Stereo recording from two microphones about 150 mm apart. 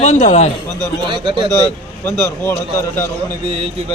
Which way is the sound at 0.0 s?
50° left (ahead or behind).